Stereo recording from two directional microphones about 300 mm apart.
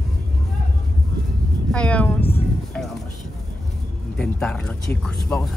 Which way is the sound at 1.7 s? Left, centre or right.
Centre.